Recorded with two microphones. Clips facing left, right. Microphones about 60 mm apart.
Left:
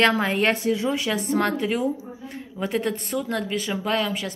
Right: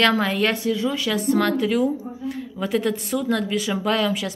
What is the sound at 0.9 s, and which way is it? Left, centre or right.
A woman's voice, centre.